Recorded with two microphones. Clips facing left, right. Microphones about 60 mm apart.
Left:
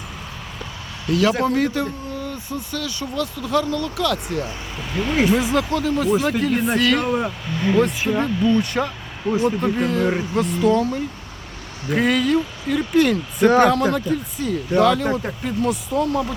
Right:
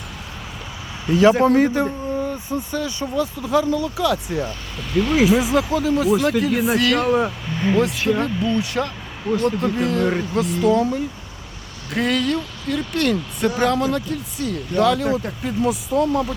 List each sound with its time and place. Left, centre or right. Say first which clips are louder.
1.0 s speech: right 4 dB; right
4.8 s speech: right 3 dB; centre
9.3 s speech: even; centre
9.6 s speech: even; centre
11.9 s speech: left 2 dB; centre